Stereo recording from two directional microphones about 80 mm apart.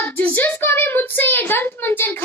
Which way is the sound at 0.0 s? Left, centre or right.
Left.